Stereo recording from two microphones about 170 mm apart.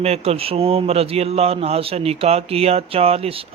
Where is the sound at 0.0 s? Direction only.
35° right (ahead or behind).